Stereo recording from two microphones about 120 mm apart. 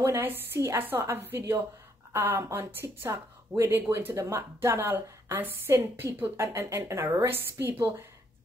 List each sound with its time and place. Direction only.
0.0 s a woman's voice: 20° right (ahead or behind)